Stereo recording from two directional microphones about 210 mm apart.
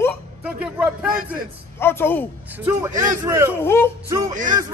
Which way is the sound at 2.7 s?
15° right (ahead or behind).